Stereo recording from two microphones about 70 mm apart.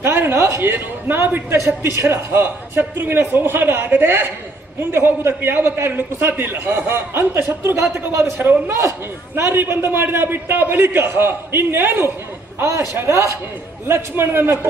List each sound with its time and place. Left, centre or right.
0.0 s a man's voice: right
6.0 s a man's voice: right